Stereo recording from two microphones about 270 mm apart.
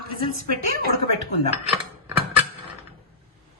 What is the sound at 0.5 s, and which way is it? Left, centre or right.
Speech, right.